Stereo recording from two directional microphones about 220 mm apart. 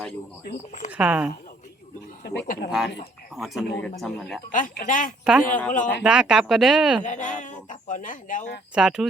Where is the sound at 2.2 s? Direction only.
50° left (ahead or behind).